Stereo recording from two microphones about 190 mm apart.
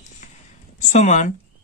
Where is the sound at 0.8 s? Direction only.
40° left (ahead or behind).